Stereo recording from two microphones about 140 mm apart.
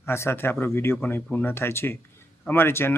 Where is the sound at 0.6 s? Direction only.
15° left (ahead or behind).